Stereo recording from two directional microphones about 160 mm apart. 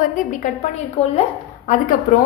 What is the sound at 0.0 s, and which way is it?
Speech, 55° left (ahead or behind).